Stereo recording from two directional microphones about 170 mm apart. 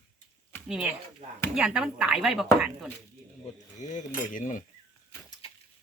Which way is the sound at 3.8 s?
45° left (ahead or behind).